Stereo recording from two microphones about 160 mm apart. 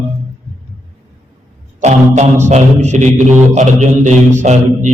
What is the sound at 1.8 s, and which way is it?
Mantra, 45° right (ahead or behind).